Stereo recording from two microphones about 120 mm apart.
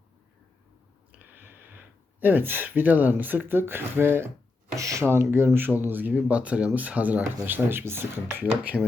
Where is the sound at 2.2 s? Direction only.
15° right (ahead or behind).